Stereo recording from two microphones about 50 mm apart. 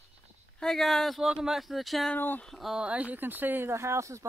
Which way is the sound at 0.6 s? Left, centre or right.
Centre.